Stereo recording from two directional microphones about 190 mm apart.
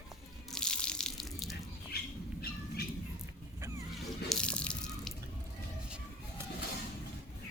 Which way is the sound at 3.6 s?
15° right (ahead or behind).